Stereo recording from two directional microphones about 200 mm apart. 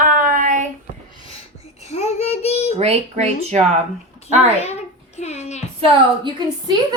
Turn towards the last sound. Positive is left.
turn(degrees=-20)  # may be behind; listen again after turning